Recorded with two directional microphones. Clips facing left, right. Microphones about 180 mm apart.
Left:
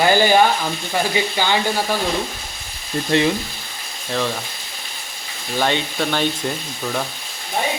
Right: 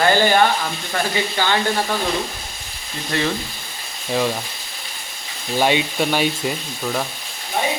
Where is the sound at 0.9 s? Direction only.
15° left (ahead or behind).